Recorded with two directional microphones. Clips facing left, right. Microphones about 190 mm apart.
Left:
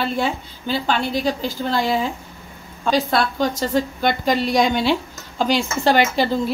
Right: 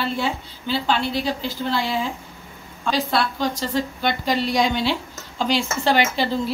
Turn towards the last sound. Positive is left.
turn(degrees=45)  # may be behind; listen again after turning